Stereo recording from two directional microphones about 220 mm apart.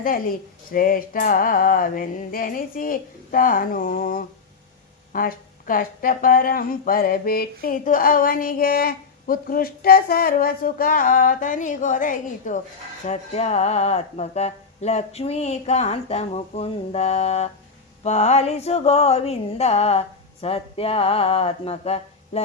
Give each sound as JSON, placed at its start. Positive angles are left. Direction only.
{"t": 0.0, "sound": "speech", "side_deg": 40}